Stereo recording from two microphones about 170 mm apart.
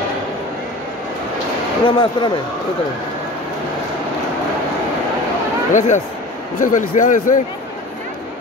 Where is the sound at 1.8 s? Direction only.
30° left (ahead or behind).